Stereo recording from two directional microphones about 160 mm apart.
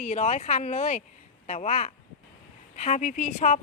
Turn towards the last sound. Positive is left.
turn(degrees=50)  # may be behind; listen again after turning